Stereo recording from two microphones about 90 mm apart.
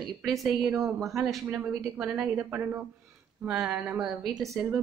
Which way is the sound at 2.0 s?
20° right (ahead or behind).